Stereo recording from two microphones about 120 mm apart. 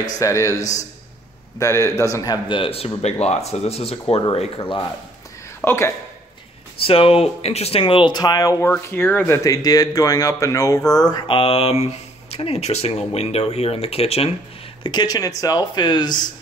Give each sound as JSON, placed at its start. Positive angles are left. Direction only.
{"t": 0.2, "sound": "speech", "side_deg": 25}
{"t": 3.0, "sound": "speech", "side_deg": 65}
{"t": 4.6, "sound": "speech", "side_deg": 45}
{"t": 5.6, "sound": "a man's voice", "side_deg": 15}
{"t": 6.8, "sound": "speech", "side_deg": 50}
{"t": 7.8, "sound": "speech", "side_deg": 40}
{"t": 9.4, "sound": "speech", "side_deg": 30}
{"t": 11.2, "sound": "speech", "side_deg": 50}
{"t": 14.8, "sound": "speech", "side_deg": 35}